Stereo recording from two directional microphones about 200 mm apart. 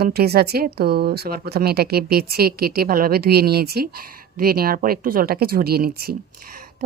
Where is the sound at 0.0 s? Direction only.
55° right (ahead or behind).